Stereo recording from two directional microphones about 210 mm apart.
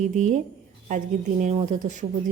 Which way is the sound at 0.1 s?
35° right (ahead or behind).